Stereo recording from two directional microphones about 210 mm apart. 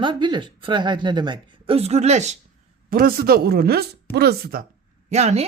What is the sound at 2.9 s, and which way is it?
Speech, 45° right (ahead or behind).